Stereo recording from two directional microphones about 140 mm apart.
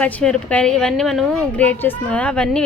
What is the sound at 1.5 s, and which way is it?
Speech, 10° left (ahead or behind).